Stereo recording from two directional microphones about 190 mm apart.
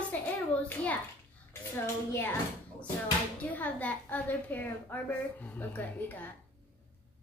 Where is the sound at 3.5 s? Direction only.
10° left (ahead or behind).